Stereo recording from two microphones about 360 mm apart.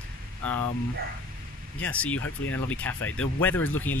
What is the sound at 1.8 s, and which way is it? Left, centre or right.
Speech, centre.